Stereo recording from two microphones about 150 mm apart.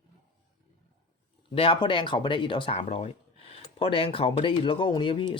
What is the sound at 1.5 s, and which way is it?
Speech, 35° left (ahead or behind).